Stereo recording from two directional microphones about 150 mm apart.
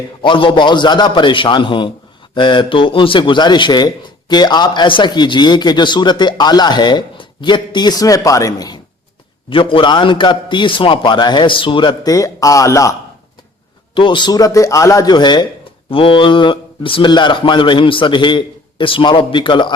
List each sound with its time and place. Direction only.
0.2 s a man's voice: 35° left (ahead or behind)
13.9 s a man's voice: 35° left (ahead or behind)